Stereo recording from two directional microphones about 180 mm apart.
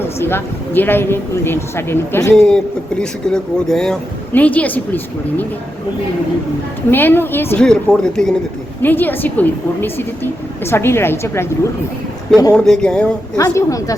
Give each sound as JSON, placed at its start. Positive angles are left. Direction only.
{"t": 0.0, "sound": "speech", "side_deg": 10}
{"t": 2.3, "sound": "speech", "side_deg": 5}
{"t": 6.9, "sound": "speech", "side_deg": 10}
{"t": 12.5, "sound": "speech", "side_deg": 5}
{"t": 13.3, "sound": "a woman's voice", "side_deg": 20}